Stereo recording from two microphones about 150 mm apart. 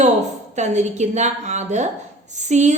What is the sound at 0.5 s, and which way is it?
A woman's voice, 50° right (ahead or behind).